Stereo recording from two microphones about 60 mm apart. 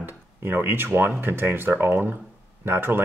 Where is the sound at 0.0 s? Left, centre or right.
Right.